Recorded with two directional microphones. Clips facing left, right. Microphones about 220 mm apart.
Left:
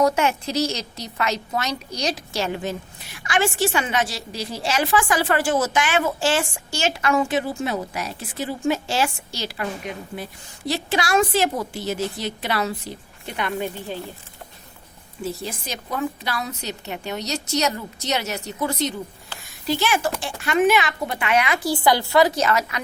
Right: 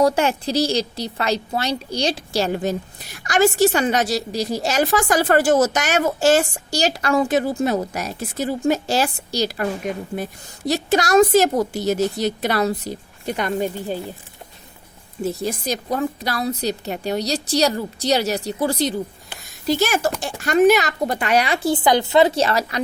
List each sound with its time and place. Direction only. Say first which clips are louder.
0.0 s a woman's voice: right 2 dB; 35° right (ahead or behind)
15.2 s a woman's voice: right 6 dB; 40° right (ahead or behind)